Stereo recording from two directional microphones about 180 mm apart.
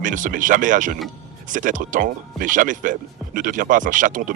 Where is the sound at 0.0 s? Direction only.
45° right (ahead or behind).